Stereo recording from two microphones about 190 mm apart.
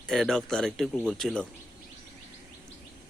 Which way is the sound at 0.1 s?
Centre (ahead or behind).